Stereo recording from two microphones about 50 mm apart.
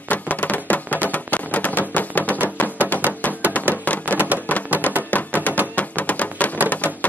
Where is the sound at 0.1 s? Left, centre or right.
Left.